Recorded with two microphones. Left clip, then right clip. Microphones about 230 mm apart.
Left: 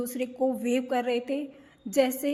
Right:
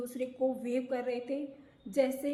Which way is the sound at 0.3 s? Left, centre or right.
Left.